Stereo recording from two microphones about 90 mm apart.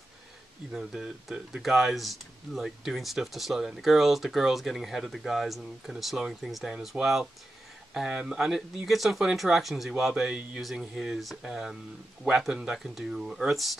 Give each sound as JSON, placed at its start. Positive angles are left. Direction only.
{"t": 0.7, "sound": "speech", "side_deg": -5}